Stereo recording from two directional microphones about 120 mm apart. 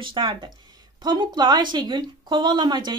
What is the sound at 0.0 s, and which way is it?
Speech, 45° right (ahead or behind).